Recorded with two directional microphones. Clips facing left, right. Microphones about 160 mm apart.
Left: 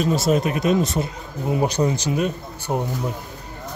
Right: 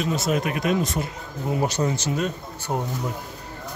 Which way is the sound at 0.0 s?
35° left (ahead or behind).